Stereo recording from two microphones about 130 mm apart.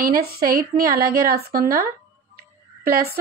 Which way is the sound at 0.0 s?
90° right.